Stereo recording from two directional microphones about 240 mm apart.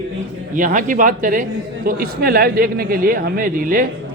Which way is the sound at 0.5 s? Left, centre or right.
Right.